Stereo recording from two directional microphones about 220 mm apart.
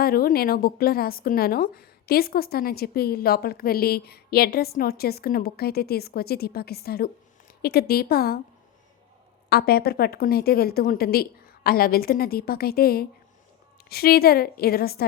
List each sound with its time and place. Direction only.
0.0 s a woman's voice: 40° left (ahead or behind)
9.5 s a woman's voice: 45° left (ahead or behind)